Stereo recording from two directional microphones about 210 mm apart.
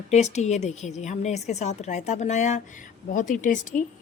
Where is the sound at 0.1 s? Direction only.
35° left (ahead or behind).